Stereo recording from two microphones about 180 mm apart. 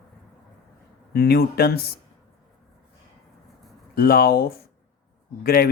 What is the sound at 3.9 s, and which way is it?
A man's voice, 55° left (ahead or behind).